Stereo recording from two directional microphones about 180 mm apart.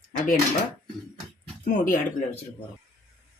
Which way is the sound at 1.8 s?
45° left (ahead or behind).